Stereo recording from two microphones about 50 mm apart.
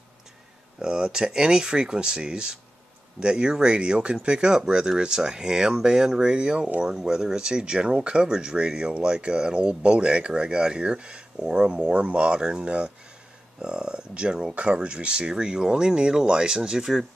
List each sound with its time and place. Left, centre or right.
0.7 s speech: centre